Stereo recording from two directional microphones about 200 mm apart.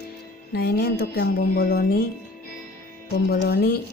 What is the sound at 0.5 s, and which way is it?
Music, 50° left (ahead or behind).